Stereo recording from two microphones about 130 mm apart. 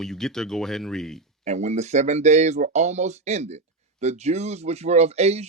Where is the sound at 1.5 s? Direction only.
60° right (ahead or behind).